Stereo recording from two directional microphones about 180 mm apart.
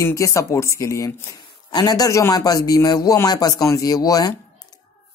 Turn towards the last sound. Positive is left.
turn(degrees=20)  # may be behind; listen again after turning